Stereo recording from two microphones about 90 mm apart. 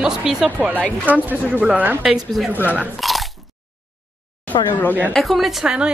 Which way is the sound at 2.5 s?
20° right (ahead or behind).